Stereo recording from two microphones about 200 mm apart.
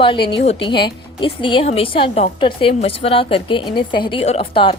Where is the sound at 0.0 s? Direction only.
25° left (ahead or behind).